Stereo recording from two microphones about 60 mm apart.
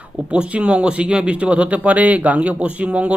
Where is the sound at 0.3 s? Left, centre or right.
Right.